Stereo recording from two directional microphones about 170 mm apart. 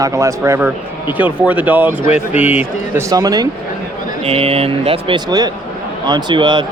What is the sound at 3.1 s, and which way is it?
Speech, 20° right (ahead or behind).